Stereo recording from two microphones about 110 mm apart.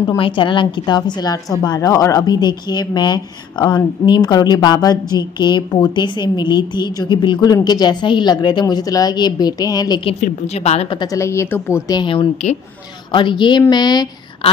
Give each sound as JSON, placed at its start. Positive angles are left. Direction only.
{"t": 0.2, "sound": "a woman's voice", "side_deg": 50}
{"t": 10.0, "sound": "a woman's voice", "side_deg": 80}
{"t": 11.1, "sound": "speech", "side_deg": 25}
{"t": 11.9, "sound": "speech", "side_deg": 45}